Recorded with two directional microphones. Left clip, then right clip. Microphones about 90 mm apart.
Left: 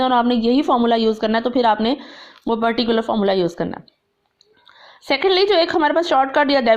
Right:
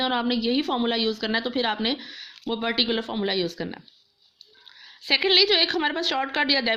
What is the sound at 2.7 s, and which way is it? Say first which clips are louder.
A woman's voice: left 6 dB; 40° left (ahead or behind).